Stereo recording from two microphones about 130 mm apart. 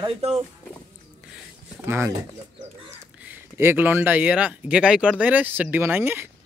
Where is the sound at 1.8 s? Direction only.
20° right (ahead or behind).